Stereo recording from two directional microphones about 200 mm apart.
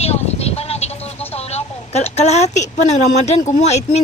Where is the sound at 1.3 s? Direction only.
30° left (ahead or behind).